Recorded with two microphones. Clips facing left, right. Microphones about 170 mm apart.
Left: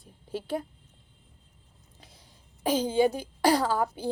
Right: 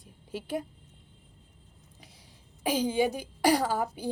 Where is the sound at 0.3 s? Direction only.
15° right (ahead or behind).